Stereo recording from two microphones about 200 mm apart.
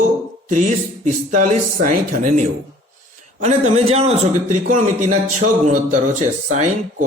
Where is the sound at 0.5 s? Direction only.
40° right (ahead or behind).